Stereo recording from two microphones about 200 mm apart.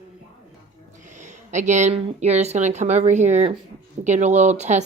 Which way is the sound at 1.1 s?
35° right (ahead or behind).